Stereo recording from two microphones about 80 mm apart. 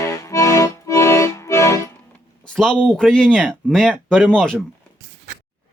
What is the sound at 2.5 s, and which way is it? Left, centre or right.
Speech, centre.